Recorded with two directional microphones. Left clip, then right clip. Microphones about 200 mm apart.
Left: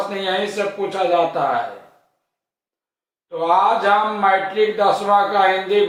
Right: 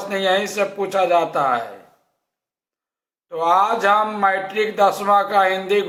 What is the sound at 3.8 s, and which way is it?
Speech, 25° right (ahead or behind).